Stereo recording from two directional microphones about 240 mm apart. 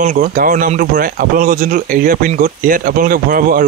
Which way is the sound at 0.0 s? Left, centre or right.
Right.